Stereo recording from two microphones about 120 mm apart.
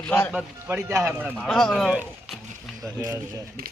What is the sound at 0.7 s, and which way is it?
Speech, 25° right (ahead or behind).